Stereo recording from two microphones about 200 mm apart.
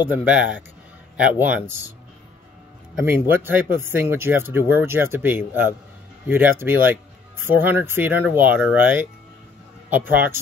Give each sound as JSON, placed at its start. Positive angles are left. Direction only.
{"t": 0.0, "sound": "speech", "side_deg": -10}
{"t": 3.1, "sound": "speech", "side_deg": -10}